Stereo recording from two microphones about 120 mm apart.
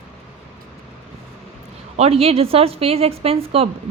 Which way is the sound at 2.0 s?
55° right (ahead or behind).